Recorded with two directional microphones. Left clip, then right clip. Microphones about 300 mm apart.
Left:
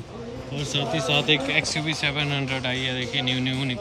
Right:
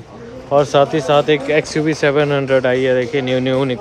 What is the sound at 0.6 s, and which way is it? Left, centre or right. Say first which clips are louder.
Speech: right 13 dB; centre.